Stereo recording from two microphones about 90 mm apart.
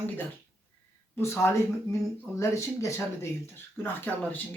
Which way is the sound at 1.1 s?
30° left (ahead or behind).